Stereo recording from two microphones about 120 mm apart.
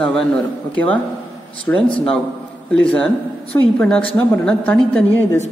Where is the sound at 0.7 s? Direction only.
15° left (ahead or behind).